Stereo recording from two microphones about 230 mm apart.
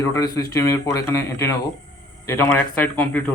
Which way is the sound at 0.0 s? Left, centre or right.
Centre.